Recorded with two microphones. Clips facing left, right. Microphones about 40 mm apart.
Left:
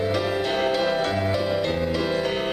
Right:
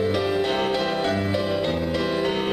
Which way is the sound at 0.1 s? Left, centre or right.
Centre.